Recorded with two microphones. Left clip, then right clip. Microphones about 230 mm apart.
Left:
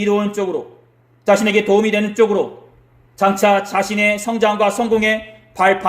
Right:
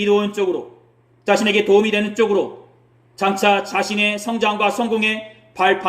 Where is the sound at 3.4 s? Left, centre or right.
Left.